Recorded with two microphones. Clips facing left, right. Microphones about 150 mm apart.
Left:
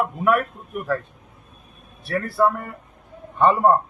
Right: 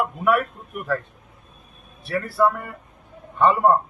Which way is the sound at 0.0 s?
Centre (ahead or behind).